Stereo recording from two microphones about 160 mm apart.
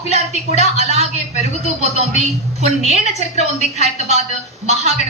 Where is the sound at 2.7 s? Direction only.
45° left (ahead or behind).